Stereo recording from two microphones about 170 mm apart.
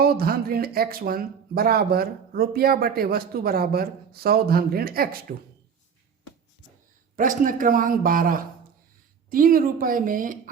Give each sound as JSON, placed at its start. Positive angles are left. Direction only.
{"t": 0.0, "sound": "speech", "side_deg": -65}
{"t": 7.2, "sound": "speech", "side_deg": -50}